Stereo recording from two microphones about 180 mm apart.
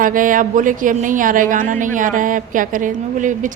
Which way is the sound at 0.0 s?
50° right (ahead or behind).